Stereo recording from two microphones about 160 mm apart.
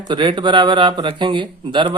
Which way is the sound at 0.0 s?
30° right (ahead or behind).